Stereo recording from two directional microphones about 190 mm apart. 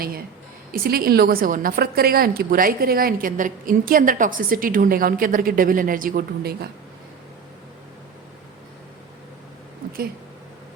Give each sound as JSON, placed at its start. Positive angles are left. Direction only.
{"t": 0.7, "sound": "a woman's voice", "side_deg": -50}